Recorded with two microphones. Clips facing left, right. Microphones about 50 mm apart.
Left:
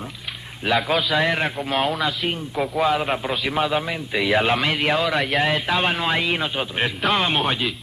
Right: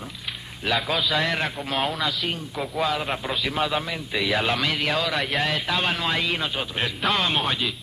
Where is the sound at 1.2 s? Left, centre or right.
Centre.